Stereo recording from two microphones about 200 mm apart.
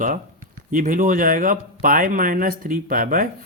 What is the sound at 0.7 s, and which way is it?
Speech, 45° right (ahead or behind).